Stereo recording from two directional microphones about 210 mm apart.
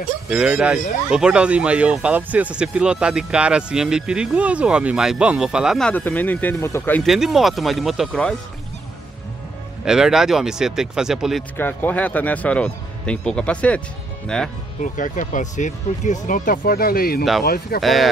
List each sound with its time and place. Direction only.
0.3 s speech: 5° right (ahead or behind)
7.0 s speech: centre (ahead or behind)
9.8 s speech: 5° right (ahead or behind)
11.5 s speech: 10° left (ahead or behind)
14.8 s speech: 40° left (ahead or behind)